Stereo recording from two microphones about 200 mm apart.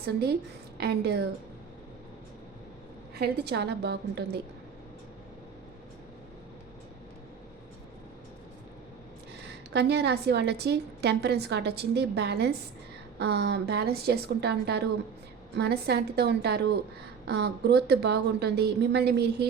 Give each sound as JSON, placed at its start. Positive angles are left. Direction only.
{"t": 0.0, "sound": "a woman's voice", "side_deg": -55}
{"t": 3.2, "sound": "a woman's voice", "side_deg": -55}
{"t": 9.7, "sound": "a woman's voice", "side_deg": -55}